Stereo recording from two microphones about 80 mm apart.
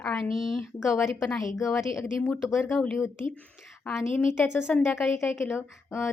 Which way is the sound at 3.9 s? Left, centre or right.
Centre.